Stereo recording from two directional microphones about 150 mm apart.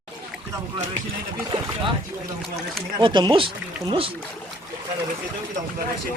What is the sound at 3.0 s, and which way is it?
Speech, 30° right (ahead or behind).